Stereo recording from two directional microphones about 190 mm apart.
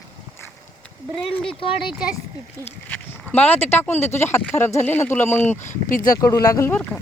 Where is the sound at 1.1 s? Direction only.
5° left (ahead or behind).